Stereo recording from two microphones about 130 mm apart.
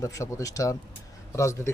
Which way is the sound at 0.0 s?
25° left (ahead or behind).